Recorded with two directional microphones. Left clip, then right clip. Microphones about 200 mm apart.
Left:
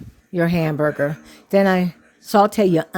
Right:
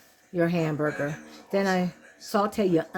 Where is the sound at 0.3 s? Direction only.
45° left (ahead or behind).